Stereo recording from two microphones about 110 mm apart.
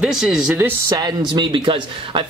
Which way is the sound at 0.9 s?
40° right (ahead or behind).